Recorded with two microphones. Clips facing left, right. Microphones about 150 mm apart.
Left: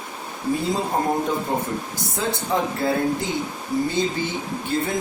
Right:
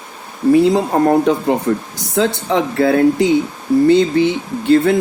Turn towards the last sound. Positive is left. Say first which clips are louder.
# right 12 dB
turn(degrees=-75)  # may be behind; listen again after turning